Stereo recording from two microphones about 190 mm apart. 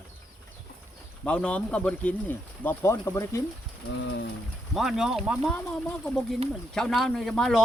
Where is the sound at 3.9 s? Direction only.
70° left (ahead or behind).